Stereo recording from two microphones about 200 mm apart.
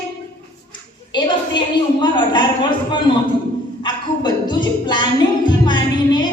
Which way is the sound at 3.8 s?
20° left (ahead or behind).